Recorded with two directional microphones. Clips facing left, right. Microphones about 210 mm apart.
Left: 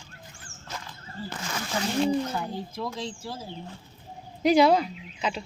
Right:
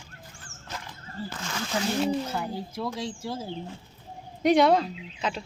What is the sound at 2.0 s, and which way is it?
Speech, 5° right (ahead or behind).